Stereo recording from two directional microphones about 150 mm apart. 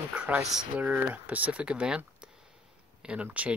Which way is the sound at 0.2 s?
5° right (ahead or behind).